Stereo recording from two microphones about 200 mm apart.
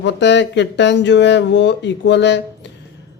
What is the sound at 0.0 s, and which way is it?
Speech, 60° left (ahead or behind).